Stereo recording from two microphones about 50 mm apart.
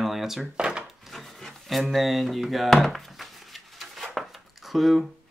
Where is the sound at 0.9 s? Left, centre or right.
Centre.